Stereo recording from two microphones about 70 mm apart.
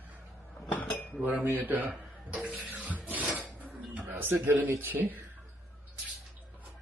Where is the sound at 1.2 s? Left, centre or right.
Right.